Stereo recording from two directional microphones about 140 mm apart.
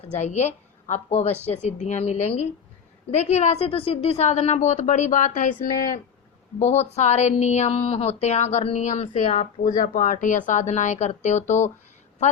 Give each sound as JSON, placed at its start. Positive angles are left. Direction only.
{"t": 0.2, "sound": "a woman's voice", "side_deg": 55}
{"t": 6.6, "sound": "a woman's voice", "side_deg": 50}